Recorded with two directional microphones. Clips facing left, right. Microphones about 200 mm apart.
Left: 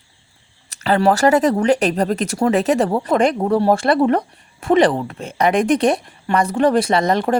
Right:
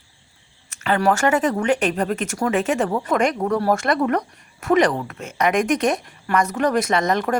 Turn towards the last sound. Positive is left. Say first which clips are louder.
# left 3 dB
turn(degrees=30)  # may be behind; listen again after turning